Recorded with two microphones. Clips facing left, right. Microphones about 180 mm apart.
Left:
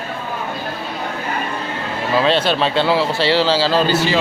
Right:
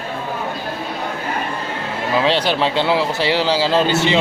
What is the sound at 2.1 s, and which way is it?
Speech, 15° right (ahead or behind).